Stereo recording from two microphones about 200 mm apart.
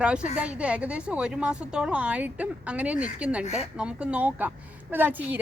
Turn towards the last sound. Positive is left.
turn(degrees=-10)  # may be behind; listen again after turning